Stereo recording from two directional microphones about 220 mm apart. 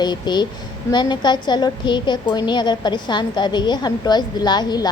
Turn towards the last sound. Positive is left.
turn(degrees=20)  # may be behind; listen again after turning